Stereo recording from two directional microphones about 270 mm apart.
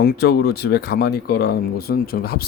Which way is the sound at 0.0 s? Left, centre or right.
Left.